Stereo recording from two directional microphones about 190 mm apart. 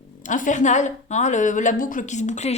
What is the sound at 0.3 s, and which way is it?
A woman's voice, 40° left (ahead or behind).